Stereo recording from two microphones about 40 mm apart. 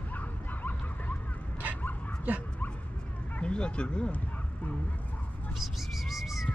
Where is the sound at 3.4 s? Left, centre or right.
Left.